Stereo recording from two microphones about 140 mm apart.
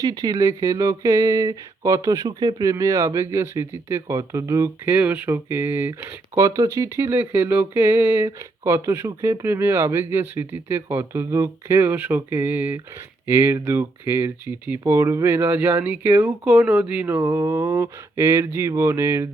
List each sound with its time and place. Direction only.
0.0 s speech: 25° right (ahead or behind); by 17.2 s 10° right (ahead or behind)
17.2 s speech: 20° right (ahead or behind)